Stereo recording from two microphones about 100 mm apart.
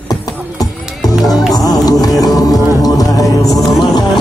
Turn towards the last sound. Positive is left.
turn(degrees=35)  # may be behind; listen again after turning